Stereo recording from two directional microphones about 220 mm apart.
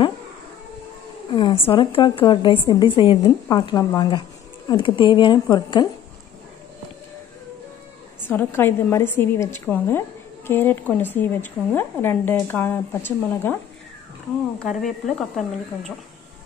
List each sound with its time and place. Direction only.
1.3 s a woman's voice: 25° left (ahead or behind)
8.3 s a woman's voice: 10° left (ahead or behind)
14.6 s speech: centre (ahead or behind)